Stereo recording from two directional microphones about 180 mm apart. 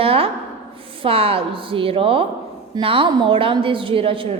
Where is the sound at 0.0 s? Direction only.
30° right (ahead or behind).